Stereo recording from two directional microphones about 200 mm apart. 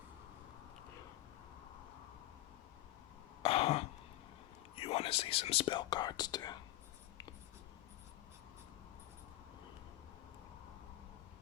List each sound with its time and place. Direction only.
3.4 s throat clearing: 30° left (ahead or behind)
4.7 s speech: 30° left (ahead or behind)